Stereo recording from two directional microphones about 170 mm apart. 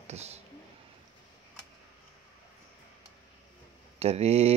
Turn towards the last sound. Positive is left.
turn(degrees=-35)  # may be behind; listen again after turning